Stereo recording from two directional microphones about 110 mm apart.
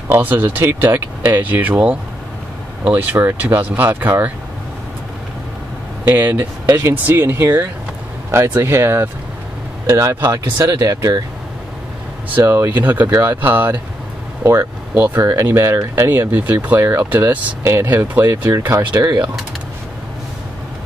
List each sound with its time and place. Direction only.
0.1 s speech: 20° right (ahead or behind)
6.0 s speech: 15° right (ahead or behind); by 11.1 s 35° right (ahead or behind)
12.4 s speech: 25° right (ahead or behind)
18.9 s speech: 30° right (ahead or behind)